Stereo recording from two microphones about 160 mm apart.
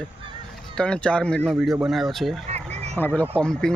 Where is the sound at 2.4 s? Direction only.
40° right (ahead or behind).